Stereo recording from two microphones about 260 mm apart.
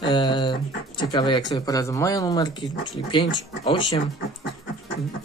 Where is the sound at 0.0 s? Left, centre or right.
Centre.